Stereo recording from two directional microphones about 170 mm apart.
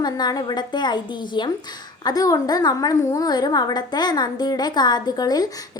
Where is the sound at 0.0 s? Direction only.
25° left (ahead or behind).